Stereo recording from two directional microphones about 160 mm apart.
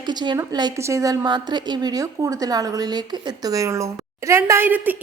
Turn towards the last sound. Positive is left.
turn(degrees=-10)  # may be behind; listen again after turning